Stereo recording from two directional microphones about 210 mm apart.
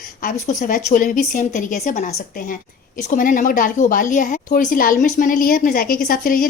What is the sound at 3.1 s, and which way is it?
A woman's voice, 40° left (ahead or behind).